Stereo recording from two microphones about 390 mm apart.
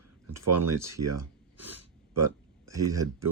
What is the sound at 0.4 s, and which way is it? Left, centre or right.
Speech, right.